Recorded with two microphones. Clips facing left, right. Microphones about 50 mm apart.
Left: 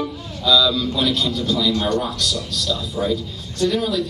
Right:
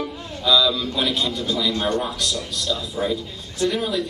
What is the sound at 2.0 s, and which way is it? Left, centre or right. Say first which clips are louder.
A man's voice: left 2 dB; centre.